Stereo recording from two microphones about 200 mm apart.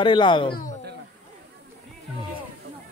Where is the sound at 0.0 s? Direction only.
25° left (ahead or behind).